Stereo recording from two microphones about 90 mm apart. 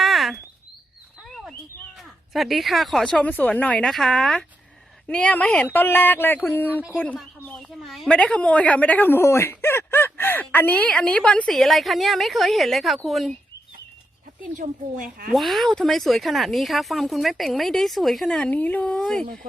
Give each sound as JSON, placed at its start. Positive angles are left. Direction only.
{"t": 0.0, "sound": "a sound", "side_deg": 0}
{"t": 1.3, "sound": "bird", "side_deg": 5}
{"t": 2.3, "sound": "speech", "side_deg": 0}
{"t": 3.8, "sound": "speech", "side_deg": 0}
{"t": 5.0, "sound": "speech", "side_deg": 10}
{"t": 5.6, "sound": "speech", "side_deg": 25}
{"t": 7.7, "sound": "speech", "side_deg": 0}
{"t": 8.1, "sound": "speech", "side_deg": 10}
{"t": 15.3, "sound": "speech", "side_deg": 0}
{"t": 18.5, "sound": "speech", "side_deg": 20}